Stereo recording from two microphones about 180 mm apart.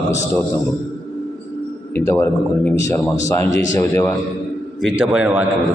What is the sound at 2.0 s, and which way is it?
A man's voice, 15° left (ahead or behind).